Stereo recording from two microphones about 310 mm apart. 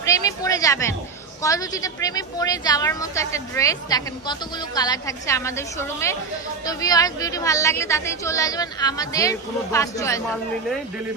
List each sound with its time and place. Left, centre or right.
0.0 s a woman's voice: centre